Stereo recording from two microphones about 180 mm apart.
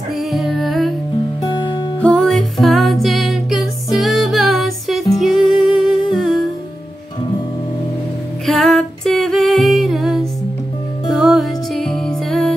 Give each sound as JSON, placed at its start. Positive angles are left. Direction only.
{"t": 0.3, "sound": "music", "side_deg": 0}
{"t": 1.5, "sound": "guitar", "side_deg": 25}
{"t": 2.0, "sound": "music", "side_deg": 5}
{"t": 8.5, "sound": "music", "side_deg": 5}